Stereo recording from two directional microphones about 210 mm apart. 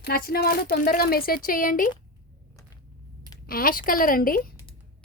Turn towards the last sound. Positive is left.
turn(degrees=45)  # may be behind; listen again after turning